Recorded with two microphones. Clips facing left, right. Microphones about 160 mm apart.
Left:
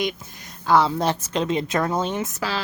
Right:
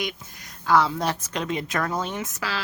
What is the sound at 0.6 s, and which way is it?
A woman's voice, 25° left (ahead or behind).